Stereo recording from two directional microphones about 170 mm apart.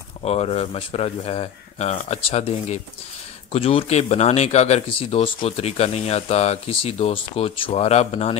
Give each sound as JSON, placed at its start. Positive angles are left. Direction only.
{"t": 0.2, "sound": "speech", "side_deg": 40}